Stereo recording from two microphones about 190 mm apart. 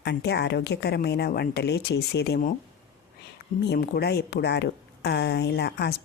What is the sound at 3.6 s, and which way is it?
Speech, 60° left (ahead or behind).